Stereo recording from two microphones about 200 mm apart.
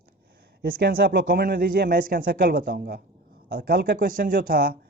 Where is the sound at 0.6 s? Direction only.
50° right (ahead or behind).